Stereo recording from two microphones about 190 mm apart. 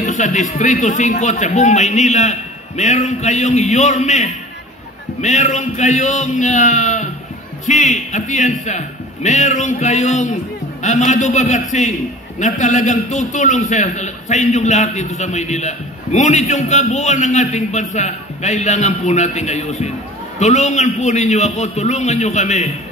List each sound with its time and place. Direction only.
0.0 s a man's voice: 40° left (ahead or behind)